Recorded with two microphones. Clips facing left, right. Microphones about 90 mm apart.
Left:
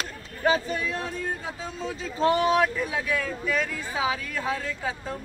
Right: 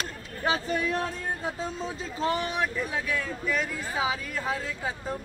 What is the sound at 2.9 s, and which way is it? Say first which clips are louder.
Speech: left 2 dB; 5° right (ahead or behind).